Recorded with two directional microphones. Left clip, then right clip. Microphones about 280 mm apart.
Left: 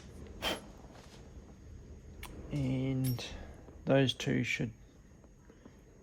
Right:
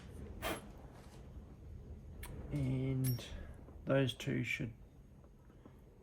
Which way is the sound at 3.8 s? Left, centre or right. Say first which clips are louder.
Left 6 dB; left.